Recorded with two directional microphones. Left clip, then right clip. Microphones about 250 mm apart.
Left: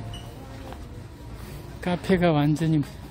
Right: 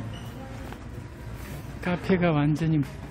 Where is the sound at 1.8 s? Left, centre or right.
Centre.